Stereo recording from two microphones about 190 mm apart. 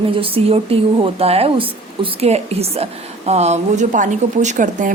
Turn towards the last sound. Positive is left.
turn(degrees=-40)  # may be behind; listen again after turning